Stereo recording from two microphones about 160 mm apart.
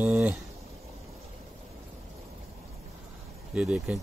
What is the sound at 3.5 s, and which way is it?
Speech, 5° right (ahead or behind).